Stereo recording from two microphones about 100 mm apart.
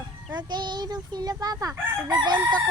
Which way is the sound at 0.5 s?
45° right (ahead or behind).